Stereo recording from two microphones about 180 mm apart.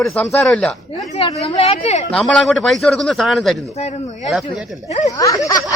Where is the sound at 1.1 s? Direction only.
35° left (ahead or behind).